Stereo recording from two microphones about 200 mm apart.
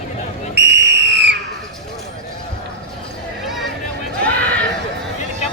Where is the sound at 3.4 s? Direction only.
Centre (ahead or behind).